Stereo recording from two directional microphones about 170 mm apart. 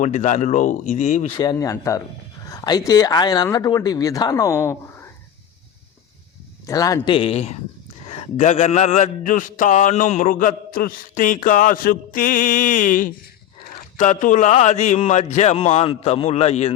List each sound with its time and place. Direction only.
0.0 s a man's voice: 45° left (ahead or behind)
1.3 s speech: 25° left (ahead or behind)
6.7 s a man's voice: 20° left (ahead or behind); by 16.7 s 40° left (ahead or behind)